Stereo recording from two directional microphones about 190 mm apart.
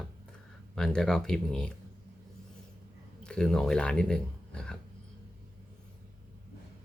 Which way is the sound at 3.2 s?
5° left (ahead or behind).